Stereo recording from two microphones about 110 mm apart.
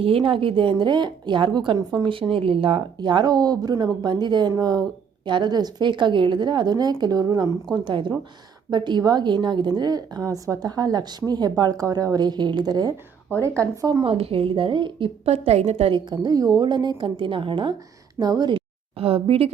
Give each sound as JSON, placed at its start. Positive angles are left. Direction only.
{"t": 0.0, "sound": "a woman's voice", "side_deg": -55}
{"t": 14.0, "sound": "a woman's voice", "side_deg": -60}
{"t": 15.9, "sound": "speech", "side_deg": -40}
{"t": 18.2, "sound": "a woman's voice", "side_deg": -40}
{"t": 18.9, "sound": "a woman's voice", "side_deg": -60}